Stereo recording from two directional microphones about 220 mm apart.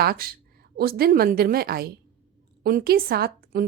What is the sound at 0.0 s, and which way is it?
A woman's voice, 45° right (ahead or behind).